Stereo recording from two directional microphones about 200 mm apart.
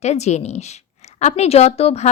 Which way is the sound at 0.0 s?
35° left (ahead or behind).